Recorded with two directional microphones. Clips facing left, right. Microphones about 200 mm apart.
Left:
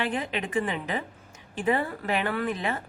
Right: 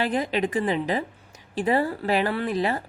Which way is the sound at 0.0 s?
35° right (ahead or behind).